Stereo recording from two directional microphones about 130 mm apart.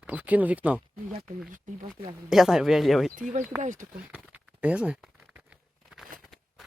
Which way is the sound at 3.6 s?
70° right (ahead or behind).